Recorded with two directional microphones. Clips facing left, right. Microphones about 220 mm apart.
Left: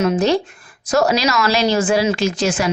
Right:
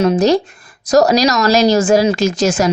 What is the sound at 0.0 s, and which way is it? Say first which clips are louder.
A woman's voice: right 4 dB; 35° right (ahead or behind).